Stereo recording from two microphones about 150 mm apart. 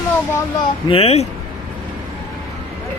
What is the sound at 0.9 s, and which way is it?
Speech, 40° left (ahead or behind).